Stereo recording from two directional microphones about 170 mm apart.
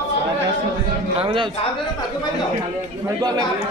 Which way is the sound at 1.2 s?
30° right (ahead or behind).